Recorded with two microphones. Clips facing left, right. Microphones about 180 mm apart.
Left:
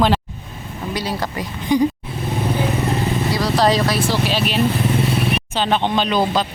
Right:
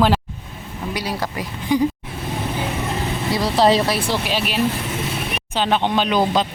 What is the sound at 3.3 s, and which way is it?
Speech, 25° right (ahead or behind).